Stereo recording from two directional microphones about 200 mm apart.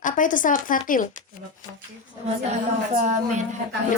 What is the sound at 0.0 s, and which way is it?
A woman's voice, 40° left (ahead or behind).